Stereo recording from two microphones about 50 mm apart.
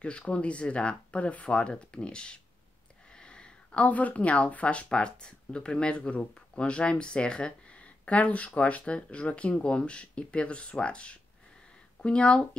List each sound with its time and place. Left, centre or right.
0.0 s speech: left